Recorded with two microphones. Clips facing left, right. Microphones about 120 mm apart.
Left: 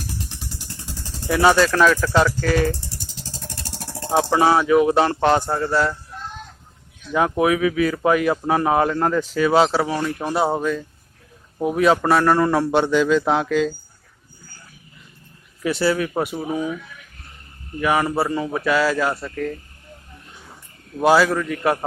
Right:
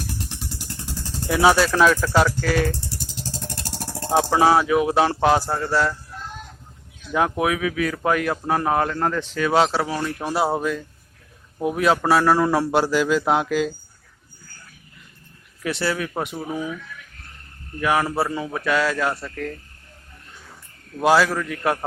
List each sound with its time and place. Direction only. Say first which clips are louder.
0.0 s vehicle: right 1 dB; 55° right (ahead or behind)
1.3 s speech: left 1 dB; 5° right (ahead or behind)
4.1 s speech: even; centre (ahead or behind)
7.1 s speech: left 3 dB; centre (ahead or behind)
15.6 s speech: left 4 dB; centre (ahead or behind)
17.7 s speech: left 1 dB; centre (ahead or behind)
21.0 s speech: left 2 dB; centre (ahead or behind)